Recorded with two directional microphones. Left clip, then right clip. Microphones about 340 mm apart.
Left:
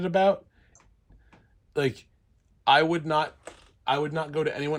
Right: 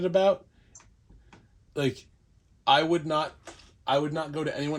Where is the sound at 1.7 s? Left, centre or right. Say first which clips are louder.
Left 2 dB; centre.